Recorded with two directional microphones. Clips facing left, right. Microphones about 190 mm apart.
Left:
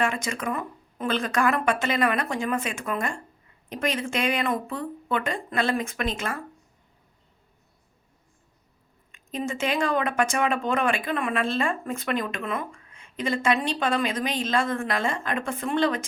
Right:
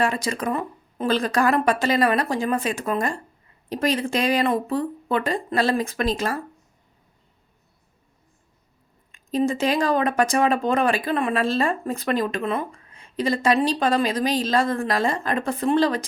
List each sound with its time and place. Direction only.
0.0 s speech: 35° right (ahead or behind)
9.1 s speech: 35° right (ahead or behind)